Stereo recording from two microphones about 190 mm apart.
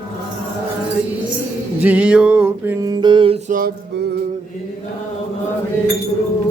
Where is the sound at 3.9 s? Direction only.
60° right (ahead or behind).